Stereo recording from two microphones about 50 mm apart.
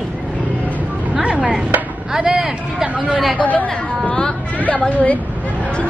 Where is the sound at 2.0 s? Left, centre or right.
Centre.